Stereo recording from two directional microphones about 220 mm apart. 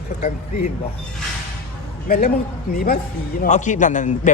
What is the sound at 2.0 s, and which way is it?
A man's voice, 40° left (ahead or behind).